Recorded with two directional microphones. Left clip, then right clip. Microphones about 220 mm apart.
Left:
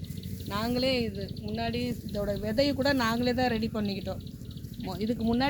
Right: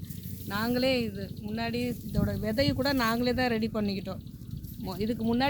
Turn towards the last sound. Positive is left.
turn(degrees=-50)  # may be behind; listen again after turning